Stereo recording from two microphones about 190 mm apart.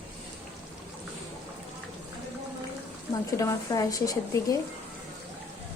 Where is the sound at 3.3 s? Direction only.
15° left (ahead or behind).